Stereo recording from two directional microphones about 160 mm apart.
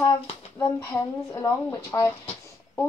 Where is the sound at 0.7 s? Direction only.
15° left (ahead or behind).